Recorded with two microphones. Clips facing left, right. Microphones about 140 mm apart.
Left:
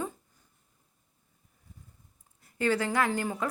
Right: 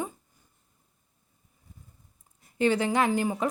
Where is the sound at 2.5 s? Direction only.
20° right (ahead or behind).